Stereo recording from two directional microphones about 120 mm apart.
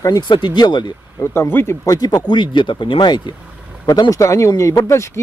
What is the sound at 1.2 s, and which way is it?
Speech, 20° left (ahead or behind).